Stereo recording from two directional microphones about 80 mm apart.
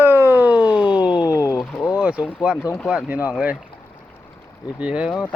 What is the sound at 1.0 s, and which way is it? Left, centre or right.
Speech, left.